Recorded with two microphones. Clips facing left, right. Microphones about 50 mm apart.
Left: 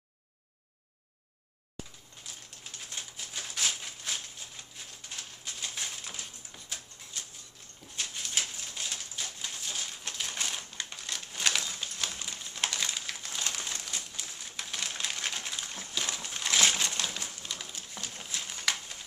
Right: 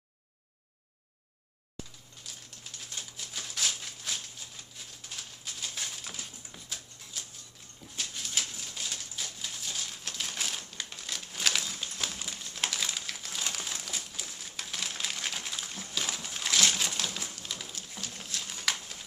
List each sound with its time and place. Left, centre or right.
2.3 s bird: centre
2.9 s a sound: centre
4.7 s bird: centre
12.5 s crumpling: centre
16.8 s bird: centre
17.7 s a sound: centre